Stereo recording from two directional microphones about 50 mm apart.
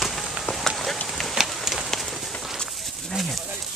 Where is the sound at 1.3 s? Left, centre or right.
Centre.